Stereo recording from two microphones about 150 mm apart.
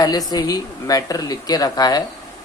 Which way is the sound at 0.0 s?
25° left (ahead or behind).